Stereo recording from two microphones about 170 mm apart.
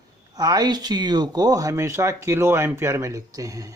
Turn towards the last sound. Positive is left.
turn(degrees=-20)  # may be behind; listen again after turning